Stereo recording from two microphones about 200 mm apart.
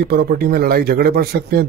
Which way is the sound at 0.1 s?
50° right (ahead or behind).